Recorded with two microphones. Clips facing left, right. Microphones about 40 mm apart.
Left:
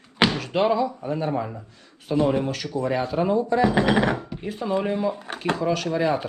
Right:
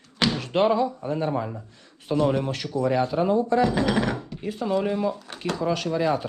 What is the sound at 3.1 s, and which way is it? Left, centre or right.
Speech, left.